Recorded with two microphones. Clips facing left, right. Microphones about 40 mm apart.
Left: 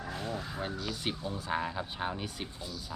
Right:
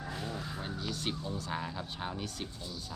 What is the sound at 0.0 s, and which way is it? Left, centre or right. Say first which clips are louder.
Crow: left 2 dB; centre.